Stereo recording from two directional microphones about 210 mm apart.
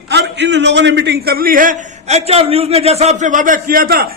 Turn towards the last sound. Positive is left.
turn(degrees=-45)  # may be behind; listen again after turning